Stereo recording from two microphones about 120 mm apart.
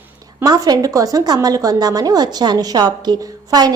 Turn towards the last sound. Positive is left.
turn(degrees=-35)  # may be behind; listen again after turning